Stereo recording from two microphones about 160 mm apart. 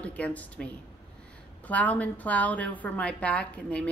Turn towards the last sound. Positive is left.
turn(degrees=10)  # may be behind; listen again after turning